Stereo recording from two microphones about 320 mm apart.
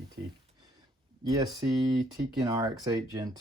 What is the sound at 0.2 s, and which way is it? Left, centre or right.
Speech, right.